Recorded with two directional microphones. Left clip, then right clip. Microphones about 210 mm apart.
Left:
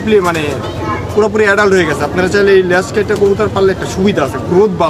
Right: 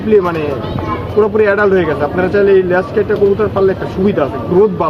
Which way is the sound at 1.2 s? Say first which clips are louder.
Left 1 dB; 20° left (ahead or behind).